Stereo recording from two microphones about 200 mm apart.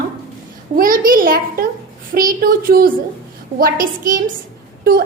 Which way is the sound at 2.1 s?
45° right (ahead or behind).